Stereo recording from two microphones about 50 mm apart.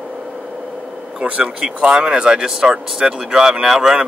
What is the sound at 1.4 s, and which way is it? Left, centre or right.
Speech, centre.